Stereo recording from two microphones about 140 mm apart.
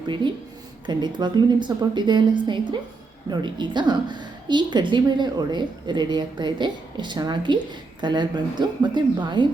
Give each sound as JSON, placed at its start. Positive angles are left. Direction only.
{"t": 0.9, "sound": "a woman's voice", "side_deg": -30}